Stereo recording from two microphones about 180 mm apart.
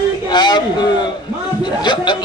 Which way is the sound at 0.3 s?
25° left (ahead or behind).